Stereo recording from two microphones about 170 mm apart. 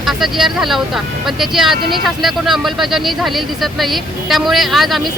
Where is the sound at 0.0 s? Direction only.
Centre (ahead or behind).